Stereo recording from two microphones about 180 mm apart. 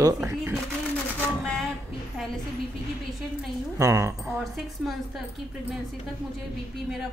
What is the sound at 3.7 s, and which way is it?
Speech, 15° right (ahead or behind).